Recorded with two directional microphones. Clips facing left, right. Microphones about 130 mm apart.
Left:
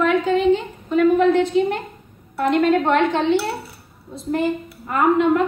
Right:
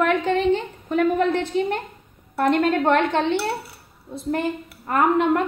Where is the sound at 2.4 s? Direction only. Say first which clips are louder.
Left 2 dB; 55° right (ahead or behind).